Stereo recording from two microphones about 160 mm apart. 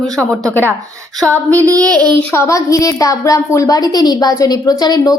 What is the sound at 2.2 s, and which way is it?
A woman's voice, 15° left (ahead or behind).